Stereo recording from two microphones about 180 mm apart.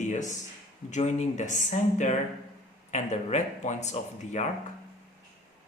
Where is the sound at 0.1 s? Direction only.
40° left (ahead or behind).